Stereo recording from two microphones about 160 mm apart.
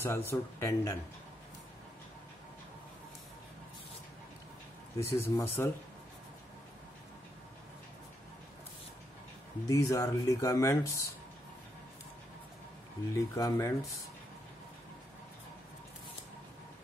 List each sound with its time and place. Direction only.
0.0 s speech: 15° left (ahead or behind)
5.0 s speech: 15° left (ahead or behind)
9.7 s speech: 20° left (ahead or behind)
13.1 s speech: 20° left (ahead or behind)